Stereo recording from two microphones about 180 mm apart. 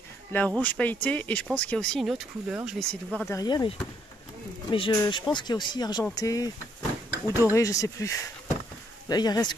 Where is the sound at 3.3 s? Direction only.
20° left (ahead or behind).